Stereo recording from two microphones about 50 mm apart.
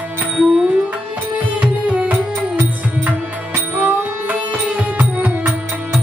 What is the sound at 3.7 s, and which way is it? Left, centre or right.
Music, right.